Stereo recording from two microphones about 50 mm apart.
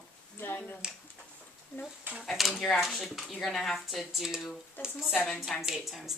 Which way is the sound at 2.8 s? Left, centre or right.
Centre.